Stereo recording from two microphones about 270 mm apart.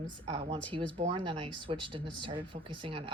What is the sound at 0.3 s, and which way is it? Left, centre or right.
Speech, centre.